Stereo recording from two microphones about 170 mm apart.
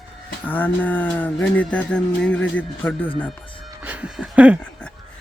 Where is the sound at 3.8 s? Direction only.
10° right (ahead or behind).